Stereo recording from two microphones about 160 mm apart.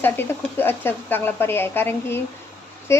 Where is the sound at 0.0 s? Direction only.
15° left (ahead or behind).